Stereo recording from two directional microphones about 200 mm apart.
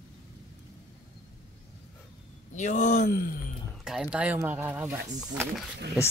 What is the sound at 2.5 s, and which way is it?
Speech, 35° left (ahead or behind).